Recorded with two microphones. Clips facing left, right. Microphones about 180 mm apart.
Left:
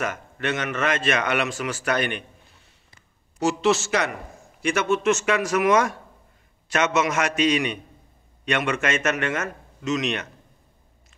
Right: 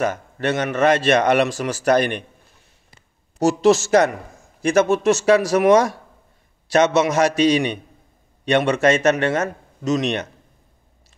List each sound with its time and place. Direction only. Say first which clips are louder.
0.0 s a man's voice: right 6 dB; 35° right (ahead or behind)
3.3 s a man's voice: right 6 dB; 45° right (ahead or behind)